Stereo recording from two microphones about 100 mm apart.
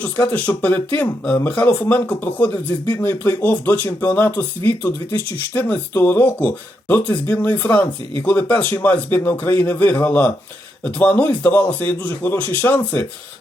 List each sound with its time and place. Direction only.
0.3 s speech: 15° left (ahead or behind)